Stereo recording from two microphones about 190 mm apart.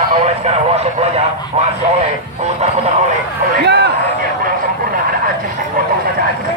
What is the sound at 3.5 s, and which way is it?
Speech, 60° right (ahead or behind).